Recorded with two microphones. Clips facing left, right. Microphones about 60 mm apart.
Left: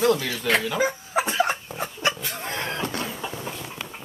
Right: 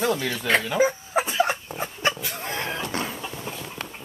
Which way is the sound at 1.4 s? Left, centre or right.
Centre.